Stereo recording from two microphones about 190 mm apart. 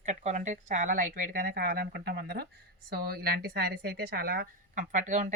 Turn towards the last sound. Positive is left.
turn(degrees=-40)  # may be behind; listen again after turning